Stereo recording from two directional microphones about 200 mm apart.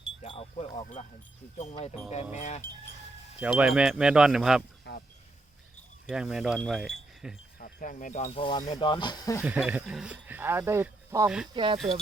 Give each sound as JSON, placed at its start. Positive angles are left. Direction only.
{"t": 0.2, "sound": "a sound", "side_deg": 30}
{"t": 1.5, "sound": "speech", "side_deg": 30}
{"t": 2.3, "sound": "wind chime", "side_deg": 35}
{"t": 3.4, "sound": "speech", "side_deg": -5}
{"t": 4.9, "sound": "speech", "side_deg": 55}
{"t": 6.1, "sound": "pulleys", "side_deg": -5}
{"t": 7.6, "sound": "speech", "side_deg": 40}
{"t": 9.4, "sound": "speech", "side_deg": -10}
{"t": 11.5, "sound": "speech", "side_deg": -25}